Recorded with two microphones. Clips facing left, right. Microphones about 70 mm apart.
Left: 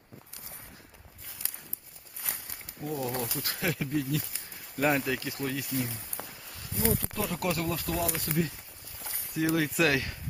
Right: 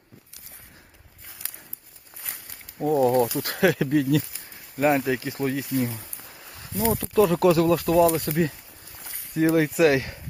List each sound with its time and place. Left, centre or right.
2.8 s speech: right
4.8 s speech: centre
6.9 s speech: right
9.3 s speech: right
9.7 s speech: right